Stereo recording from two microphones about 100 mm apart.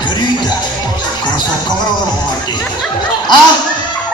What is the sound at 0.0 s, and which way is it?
Music, 50° left (ahead or behind).